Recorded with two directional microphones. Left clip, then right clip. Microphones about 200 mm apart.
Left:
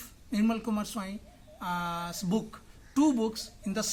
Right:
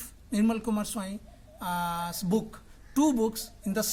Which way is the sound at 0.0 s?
25° right (ahead or behind).